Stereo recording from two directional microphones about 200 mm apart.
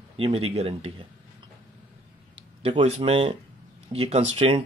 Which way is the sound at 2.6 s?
30° right (ahead or behind).